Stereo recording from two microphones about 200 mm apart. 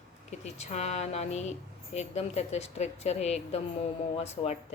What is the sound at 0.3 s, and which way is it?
Speech, 35° left (ahead or behind).